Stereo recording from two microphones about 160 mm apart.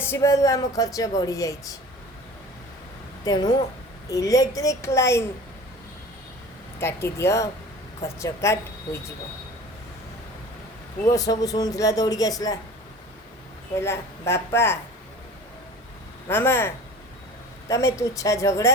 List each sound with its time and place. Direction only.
0.0 s speech: 15° left (ahead or behind)
3.2 s speech: 25° left (ahead or behind)
6.7 s a woman's voice: 15° left (ahead or behind)
11.1 s speech: 20° left (ahead or behind)
13.7 s a woman's voice: 15° left (ahead or behind)
16.3 s a woman's voice: 15° left (ahead or behind)